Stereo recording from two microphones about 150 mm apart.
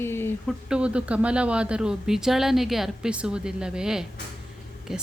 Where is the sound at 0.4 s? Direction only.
5° right (ahead or behind).